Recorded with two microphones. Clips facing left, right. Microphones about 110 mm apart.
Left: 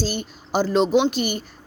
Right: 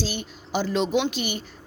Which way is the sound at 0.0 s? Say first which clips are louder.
Left 4 dB; 40° left (ahead or behind).